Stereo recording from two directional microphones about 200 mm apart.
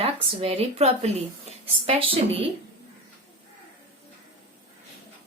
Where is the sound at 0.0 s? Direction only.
30° right (ahead or behind).